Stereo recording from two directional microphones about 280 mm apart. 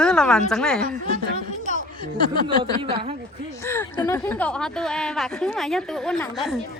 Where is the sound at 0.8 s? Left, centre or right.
Right.